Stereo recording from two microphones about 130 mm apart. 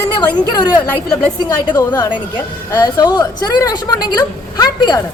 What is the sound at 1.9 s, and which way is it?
A woman's voice, 30° left (ahead or behind).